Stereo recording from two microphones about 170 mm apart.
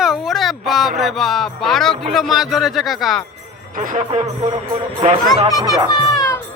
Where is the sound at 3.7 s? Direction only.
50° right (ahead or behind).